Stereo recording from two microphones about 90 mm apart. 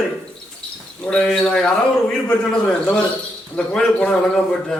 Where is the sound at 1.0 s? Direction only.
15° left (ahead or behind).